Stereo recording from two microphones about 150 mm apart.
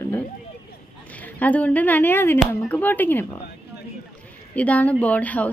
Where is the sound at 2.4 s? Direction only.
Centre (ahead or behind).